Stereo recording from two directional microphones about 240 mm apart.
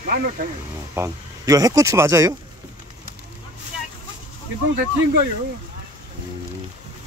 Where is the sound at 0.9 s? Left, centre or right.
Centre.